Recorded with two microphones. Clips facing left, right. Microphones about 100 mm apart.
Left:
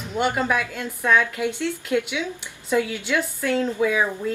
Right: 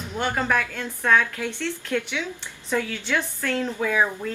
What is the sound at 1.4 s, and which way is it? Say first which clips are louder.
A woman's voice: left 4 dB; 15° left (ahead or behind).